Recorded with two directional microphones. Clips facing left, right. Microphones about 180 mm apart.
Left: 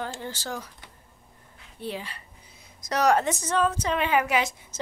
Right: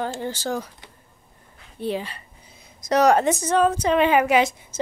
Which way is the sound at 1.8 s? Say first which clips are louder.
Right 7 dB; 25° right (ahead or behind).